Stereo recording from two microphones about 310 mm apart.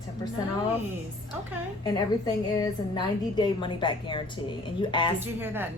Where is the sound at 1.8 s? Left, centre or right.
Centre.